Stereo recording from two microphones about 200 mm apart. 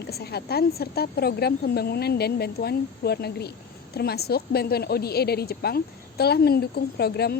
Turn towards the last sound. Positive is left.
turn(degrees=55)  # may be behind; listen again after turning